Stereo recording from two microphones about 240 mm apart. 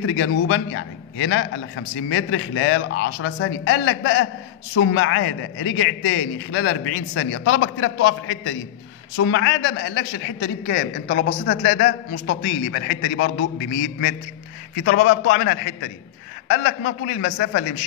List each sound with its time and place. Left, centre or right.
0.0 s a man's voice: left
17.4 s a man's voice: left